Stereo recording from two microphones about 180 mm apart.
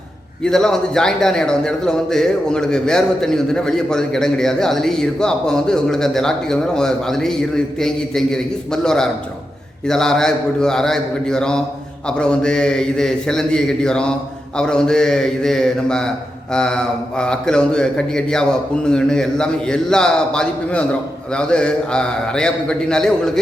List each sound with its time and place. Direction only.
0.4 s speech: 5° left (ahead or behind)